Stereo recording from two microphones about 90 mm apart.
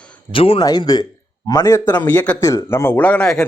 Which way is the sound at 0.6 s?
45° left (ahead or behind).